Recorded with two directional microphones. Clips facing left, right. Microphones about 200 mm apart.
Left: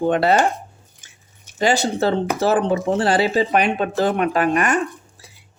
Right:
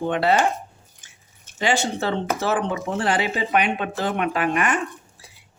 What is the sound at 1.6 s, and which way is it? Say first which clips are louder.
Speech: left 4 dB; 40° left (ahead or behind).